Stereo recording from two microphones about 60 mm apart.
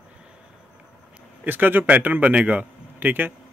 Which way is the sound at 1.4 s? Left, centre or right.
Right.